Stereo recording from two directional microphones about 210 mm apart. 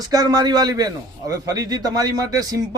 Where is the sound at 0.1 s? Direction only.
20° right (ahead or behind).